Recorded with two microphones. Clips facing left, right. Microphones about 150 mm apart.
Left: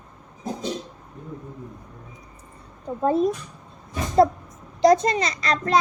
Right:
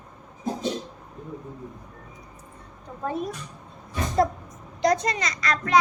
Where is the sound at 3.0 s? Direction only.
30° left (ahead or behind).